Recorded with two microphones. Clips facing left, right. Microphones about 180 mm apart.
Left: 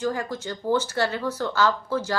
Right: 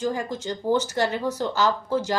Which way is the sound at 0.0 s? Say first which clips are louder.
Even; 20° right (ahead or behind).